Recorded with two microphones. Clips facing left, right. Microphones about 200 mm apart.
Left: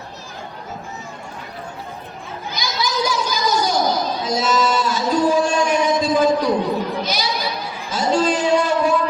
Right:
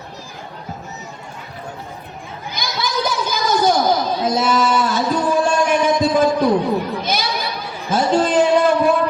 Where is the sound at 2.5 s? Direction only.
55° right (ahead or behind).